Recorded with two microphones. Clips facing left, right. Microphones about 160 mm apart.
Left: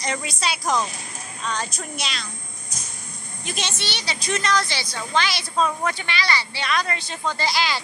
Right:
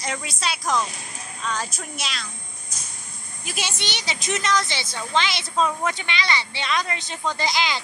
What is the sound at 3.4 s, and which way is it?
A woman's voice, 10° right (ahead or behind).